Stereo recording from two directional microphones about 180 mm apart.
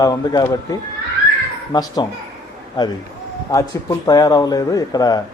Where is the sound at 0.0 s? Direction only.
20° left (ahead or behind).